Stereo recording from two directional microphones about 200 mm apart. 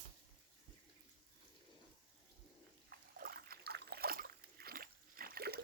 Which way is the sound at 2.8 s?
50° right (ahead or behind).